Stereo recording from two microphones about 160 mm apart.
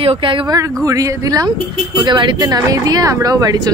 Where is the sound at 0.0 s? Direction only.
30° right (ahead or behind).